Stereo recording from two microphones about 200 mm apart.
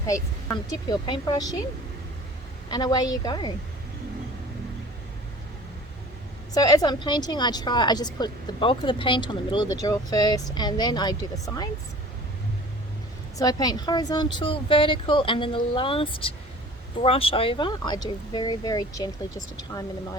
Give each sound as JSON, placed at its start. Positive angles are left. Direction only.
{"t": 0.1, "sound": "a woman's voice", "side_deg": 20}
{"t": 2.6, "sound": "a woman's voice", "side_deg": 20}
{"t": 6.5, "sound": "a woman's voice", "side_deg": 20}
{"t": 13.4, "sound": "a woman's voice", "side_deg": 20}